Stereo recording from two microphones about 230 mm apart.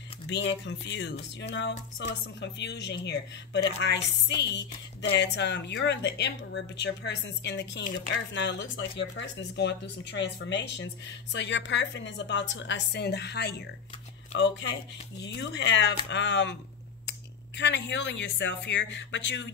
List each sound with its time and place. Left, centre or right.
0.3 s speech: left
17.6 s speech: left